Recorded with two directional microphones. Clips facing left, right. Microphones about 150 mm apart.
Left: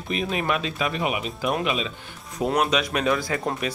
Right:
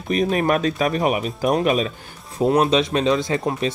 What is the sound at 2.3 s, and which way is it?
Speech, 30° right (ahead or behind).